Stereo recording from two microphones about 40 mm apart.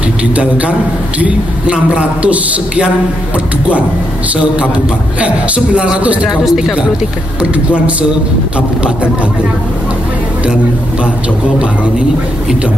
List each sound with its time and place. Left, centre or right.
0.4 s a man's voice: right
6.2 s speech: centre
8.5 s a man's voice: right